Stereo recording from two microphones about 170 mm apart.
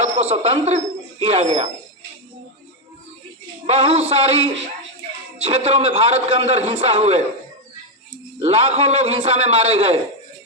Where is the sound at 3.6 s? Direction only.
40° right (ahead or behind).